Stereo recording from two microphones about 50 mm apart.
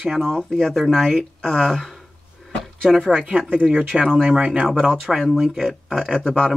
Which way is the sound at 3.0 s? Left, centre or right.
Right.